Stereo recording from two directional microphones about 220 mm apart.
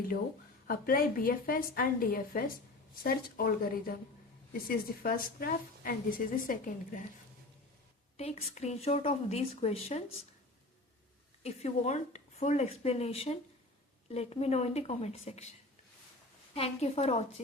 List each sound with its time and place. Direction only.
0.7 s a woman's voice: 40° left (ahead or behind)
8.1 s speech: 30° left (ahead or behind)
11.4 s speech: 30° left (ahead or behind)
16.6 s speech: 25° left (ahead or behind)